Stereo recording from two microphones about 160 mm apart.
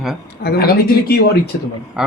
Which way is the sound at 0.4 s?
80° left.